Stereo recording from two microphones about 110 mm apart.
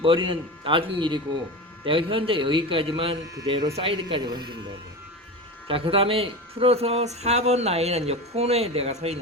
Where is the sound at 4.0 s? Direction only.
40° right (ahead or behind).